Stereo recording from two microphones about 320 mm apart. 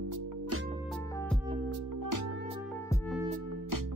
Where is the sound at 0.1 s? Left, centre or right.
Right.